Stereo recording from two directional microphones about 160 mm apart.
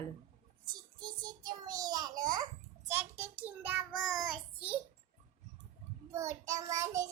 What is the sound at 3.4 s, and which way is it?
Child singing, 10° right (ahead or behind).